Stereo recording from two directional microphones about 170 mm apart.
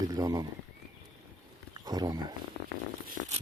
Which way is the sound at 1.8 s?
25° right (ahead or behind).